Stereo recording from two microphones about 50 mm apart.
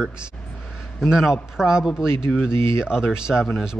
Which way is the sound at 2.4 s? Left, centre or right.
Left.